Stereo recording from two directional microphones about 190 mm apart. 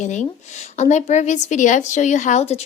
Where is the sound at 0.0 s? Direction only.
40° left (ahead or behind).